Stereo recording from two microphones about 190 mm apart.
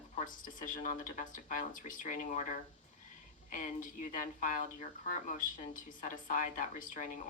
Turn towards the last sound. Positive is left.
turn(degrees=45)  # may be behind; listen again after turning